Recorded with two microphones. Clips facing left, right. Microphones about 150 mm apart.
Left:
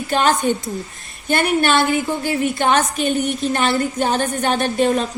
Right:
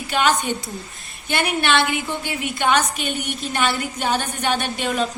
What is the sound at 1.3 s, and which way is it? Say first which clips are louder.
A woman's voice: left 4 dB; 45° left (ahead or behind).